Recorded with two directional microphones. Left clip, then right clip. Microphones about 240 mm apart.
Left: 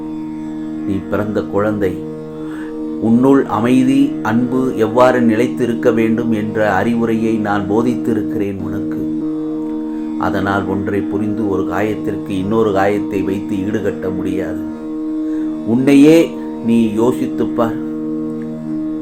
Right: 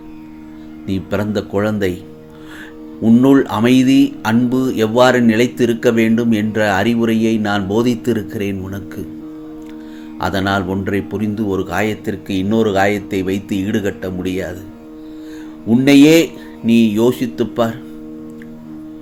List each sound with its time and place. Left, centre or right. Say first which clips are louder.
0.9 s speech: even; right
3.2 s speech: left 1 dB; right
10.2 s speech: even; right
15.8 s speech: even; right